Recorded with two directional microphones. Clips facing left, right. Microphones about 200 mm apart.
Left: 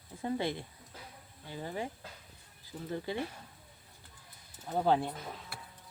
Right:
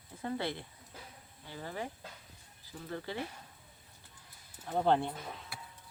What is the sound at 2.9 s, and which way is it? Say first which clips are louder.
Speech: left 3 dB; 15° left (ahead or behind).